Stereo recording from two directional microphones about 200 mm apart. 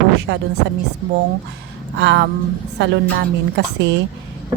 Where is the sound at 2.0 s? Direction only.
60° right (ahead or behind).